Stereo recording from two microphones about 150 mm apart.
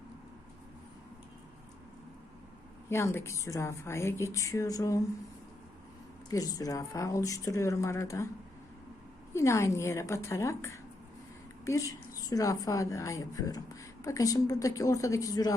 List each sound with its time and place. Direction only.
2.9 s a woman's voice: 15° left (ahead or behind)
6.3 s a woman's voice: 25° left (ahead or behind)
9.3 s a woman's voice: 20° left (ahead or behind)